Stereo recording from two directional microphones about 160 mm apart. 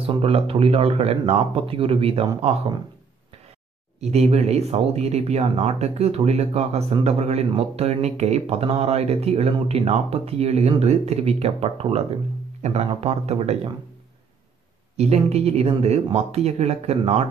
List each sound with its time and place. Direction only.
0.0 s speech: 35° right (ahead or behind)
4.0 s speech: 40° right (ahead or behind)
15.0 s speech: 40° right (ahead or behind)